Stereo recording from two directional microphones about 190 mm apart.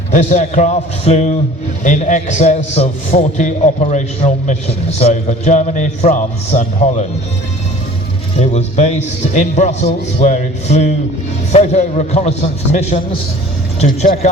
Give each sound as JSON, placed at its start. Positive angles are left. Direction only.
{"t": 0.1, "sound": "a man's voice", "side_deg": 40}
{"t": 8.4, "sound": "a man's voice", "side_deg": 40}